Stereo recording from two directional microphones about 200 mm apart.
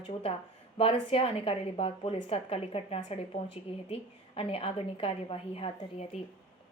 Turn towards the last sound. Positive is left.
turn(degrees=30)  # may be behind; listen again after turning